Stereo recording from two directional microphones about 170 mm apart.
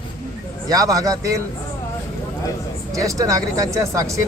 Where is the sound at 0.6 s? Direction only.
20° right (ahead or behind).